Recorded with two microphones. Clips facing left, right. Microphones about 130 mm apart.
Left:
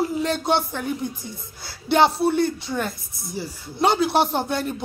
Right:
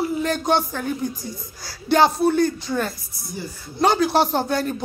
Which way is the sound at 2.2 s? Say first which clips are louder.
Right 2 dB; 20° left (ahead or behind).